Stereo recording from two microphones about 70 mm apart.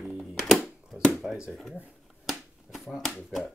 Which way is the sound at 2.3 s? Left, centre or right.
Centre.